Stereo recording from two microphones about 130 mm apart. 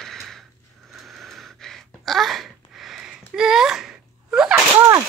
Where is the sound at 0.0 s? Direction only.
5° left (ahead or behind).